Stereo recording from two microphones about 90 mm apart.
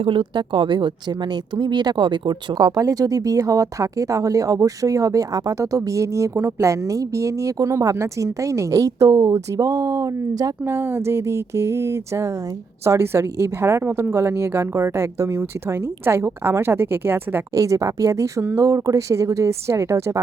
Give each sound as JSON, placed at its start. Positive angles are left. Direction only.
{"t": 0.0, "sound": "speech", "side_deg": -70}
{"t": 2.6, "sound": "speech", "side_deg": -40}
{"t": 10.7, "sound": "a woman's voice", "side_deg": -25}
{"t": 17.5, "sound": "speech", "side_deg": -35}